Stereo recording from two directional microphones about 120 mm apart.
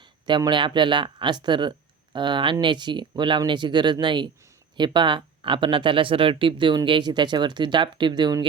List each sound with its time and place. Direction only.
0.3 s speech: 40° right (ahead or behind)